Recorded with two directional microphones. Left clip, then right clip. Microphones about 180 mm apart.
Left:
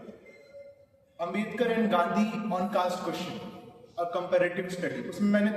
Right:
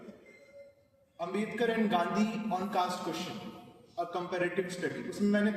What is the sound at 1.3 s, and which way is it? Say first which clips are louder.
A man's voice: left 2 dB; 25° left (ahead or behind).